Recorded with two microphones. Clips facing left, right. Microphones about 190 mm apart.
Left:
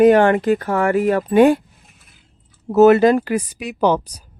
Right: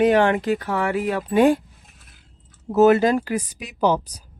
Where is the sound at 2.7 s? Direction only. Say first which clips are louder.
Left 4 dB; 70° left (ahead or behind).